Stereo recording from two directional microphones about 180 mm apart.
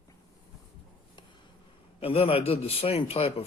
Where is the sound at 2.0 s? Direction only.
30° left (ahead or behind).